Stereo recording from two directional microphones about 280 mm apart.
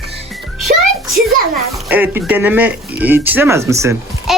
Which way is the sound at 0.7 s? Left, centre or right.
Right.